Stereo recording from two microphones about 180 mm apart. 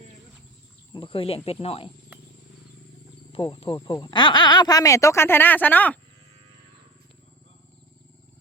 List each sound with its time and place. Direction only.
0.9 s speech: 30° left (ahead or behind)
3.3 s speech: 30° left (ahead or behind); by 6.0 s 10° left (ahead or behind)